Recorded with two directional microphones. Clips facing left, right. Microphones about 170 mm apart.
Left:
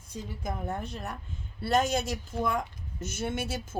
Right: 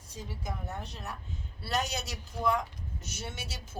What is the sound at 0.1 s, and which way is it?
Speech, 50° left (ahead or behind).